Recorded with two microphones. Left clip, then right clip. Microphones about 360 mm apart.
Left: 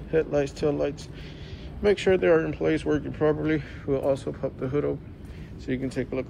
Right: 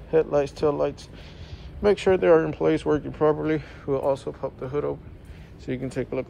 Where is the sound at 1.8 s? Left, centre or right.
Centre.